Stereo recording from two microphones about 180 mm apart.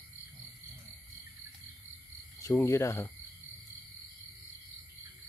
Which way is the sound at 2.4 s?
15° left (ahead or behind).